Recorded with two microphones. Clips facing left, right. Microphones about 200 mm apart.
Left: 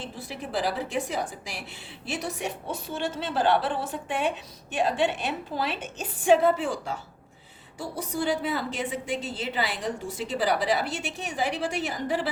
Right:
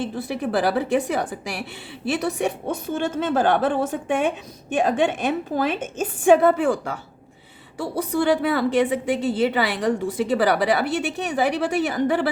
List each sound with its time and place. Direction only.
0.0 s a woman's voice: 60° right (ahead or behind)